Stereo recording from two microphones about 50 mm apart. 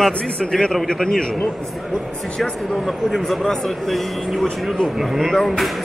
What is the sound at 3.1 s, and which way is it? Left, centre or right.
Speech, centre.